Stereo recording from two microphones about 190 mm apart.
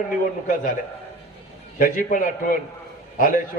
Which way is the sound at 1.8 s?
45° left (ahead or behind).